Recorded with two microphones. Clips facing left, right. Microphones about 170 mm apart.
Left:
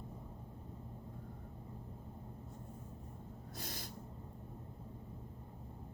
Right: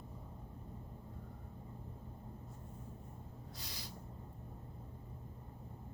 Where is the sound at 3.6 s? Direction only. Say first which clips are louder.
Left 5 dB; 50° left (ahead or behind).